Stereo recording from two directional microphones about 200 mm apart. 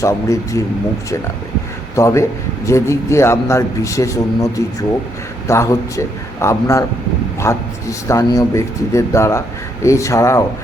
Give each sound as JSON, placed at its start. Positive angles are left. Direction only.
{"t": 0.0, "sound": "a man's voice", "side_deg": 15}
{"t": 2.0, "sound": "a man's voice", "side_deg": 15}